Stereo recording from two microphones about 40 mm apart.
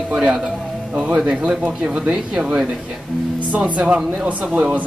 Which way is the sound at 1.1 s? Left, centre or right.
Right.